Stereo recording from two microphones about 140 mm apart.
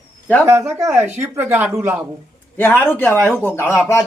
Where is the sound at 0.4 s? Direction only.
20° right (ahead or behind).